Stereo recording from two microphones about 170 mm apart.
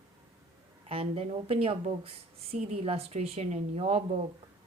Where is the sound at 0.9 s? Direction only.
35° right (ahead or behind).